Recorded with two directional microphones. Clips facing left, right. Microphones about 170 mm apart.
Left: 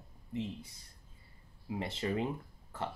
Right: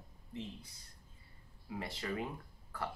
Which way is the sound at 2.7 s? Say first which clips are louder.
Left 2 dB; 25° left (ahead or behind).